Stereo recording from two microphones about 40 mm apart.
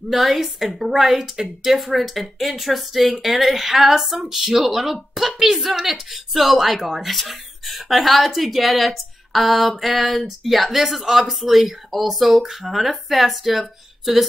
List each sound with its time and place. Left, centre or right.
0.1 s a woman's voice: centre